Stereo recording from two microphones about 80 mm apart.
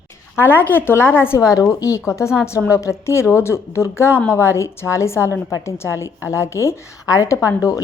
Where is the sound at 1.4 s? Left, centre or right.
Left.